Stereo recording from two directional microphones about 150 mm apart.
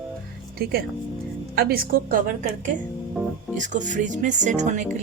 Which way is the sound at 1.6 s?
85° right.